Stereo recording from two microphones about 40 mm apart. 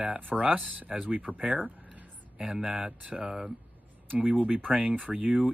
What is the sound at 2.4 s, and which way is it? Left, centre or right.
Speech, centre.